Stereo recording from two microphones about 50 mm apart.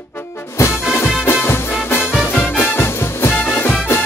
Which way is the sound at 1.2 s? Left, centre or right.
Left.